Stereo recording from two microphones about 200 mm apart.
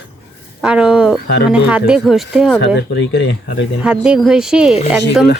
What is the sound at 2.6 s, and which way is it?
Speech, 60° left (ahead or behind).